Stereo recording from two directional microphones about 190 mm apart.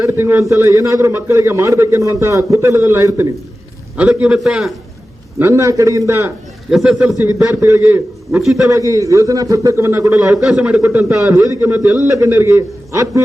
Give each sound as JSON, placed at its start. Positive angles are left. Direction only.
{"t": 0.0, "sound": "a man's voice", "side_deg": -10}
{"t": 5.4, "sound": "a man's voice", "side_deg": -15}
{"t": 6.7, "sound": "a man's voice", "side_deg": 0}
{"t": 7.2, "sound": "a man's voice", "side_deg": -15}
{"t": 8.6, "sound": "a man's voice", "side_deg": -15}
{"t": 10.4, "sound": "a man's voice", "side_deg": -5}